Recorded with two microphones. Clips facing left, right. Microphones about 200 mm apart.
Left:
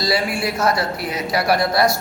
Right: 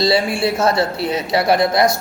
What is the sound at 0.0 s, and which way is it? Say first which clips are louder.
A man's voice: right 4 dB; 25° right (ahead or behind).